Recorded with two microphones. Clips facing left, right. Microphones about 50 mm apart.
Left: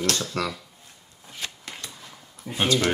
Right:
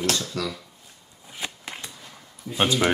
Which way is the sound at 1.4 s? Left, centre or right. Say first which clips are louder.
Right 2 dB; centre.